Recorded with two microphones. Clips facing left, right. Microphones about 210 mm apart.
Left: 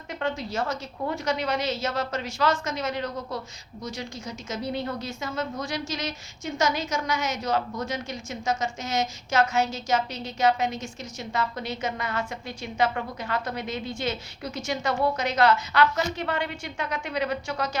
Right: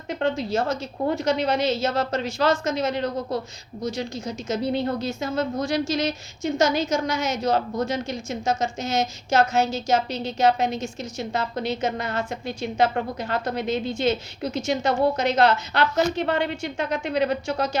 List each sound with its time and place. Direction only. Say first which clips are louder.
0.2 s a woman's voice: right 5 dB; 30° right (ahead or behind)